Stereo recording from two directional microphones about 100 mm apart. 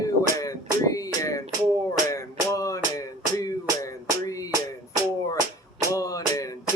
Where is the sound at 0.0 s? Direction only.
35° left (ahead or behind).